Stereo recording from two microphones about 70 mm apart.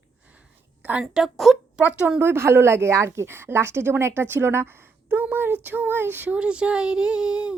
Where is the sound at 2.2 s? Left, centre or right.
Right.